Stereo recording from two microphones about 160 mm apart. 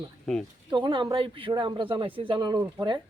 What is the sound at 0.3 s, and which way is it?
Speech, 5° left (ahead or behind).